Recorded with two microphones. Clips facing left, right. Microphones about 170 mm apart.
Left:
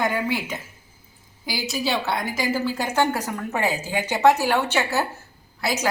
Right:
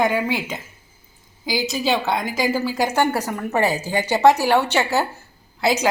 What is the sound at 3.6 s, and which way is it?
Speech, 85° right.